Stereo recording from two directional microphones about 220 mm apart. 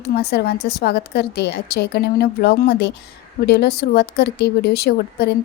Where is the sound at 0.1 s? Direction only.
45° left (ahead or behind).